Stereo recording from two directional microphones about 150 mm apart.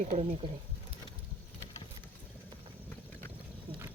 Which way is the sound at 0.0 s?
45° right (ahead or behind).